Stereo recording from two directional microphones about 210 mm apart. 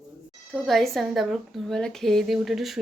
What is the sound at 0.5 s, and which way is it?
Speech, centre (ahead or behind).